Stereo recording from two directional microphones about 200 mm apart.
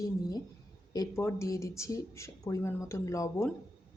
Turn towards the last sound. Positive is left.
turn(degrees=15)  # may be behind; listen again after turning